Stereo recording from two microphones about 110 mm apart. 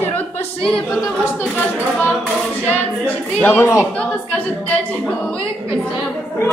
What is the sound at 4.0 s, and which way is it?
A woman's voice, 10° left (ahead or behind).